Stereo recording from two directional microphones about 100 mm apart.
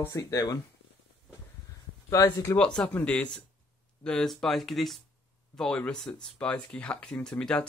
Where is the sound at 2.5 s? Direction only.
10° left (ahead or behind).